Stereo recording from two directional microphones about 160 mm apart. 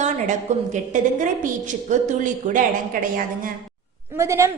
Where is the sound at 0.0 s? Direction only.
50° right (ahead or behind).